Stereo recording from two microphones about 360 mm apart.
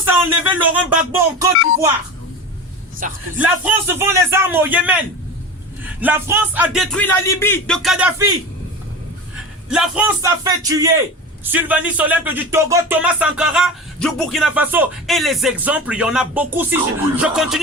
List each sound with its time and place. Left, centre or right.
0.2 s speech: centre
3.0 s a man's voice: right
3.3 s speech: centre
9.6 s speech: centre